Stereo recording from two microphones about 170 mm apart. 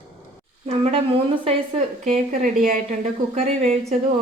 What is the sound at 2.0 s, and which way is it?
A woman's voice, 40° right (ahead or behind).